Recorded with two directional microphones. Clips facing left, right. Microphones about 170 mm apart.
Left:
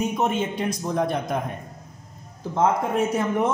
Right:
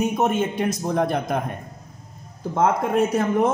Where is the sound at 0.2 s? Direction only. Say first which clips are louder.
Right 3 dB; 50° right (ahead or behind).